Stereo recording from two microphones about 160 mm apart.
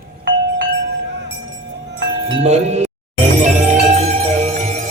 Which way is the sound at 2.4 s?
45° right (ahead or behind).